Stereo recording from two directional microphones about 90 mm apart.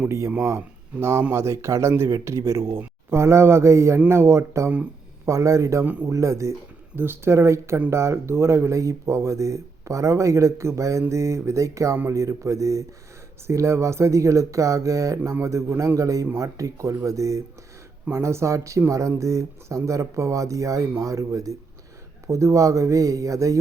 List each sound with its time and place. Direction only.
0.0 s speech: 30° right (ahead or behind)
5.8 s speech: 20° right (ahead or behind)
6.1 s speech: 35° right (ahead or behind)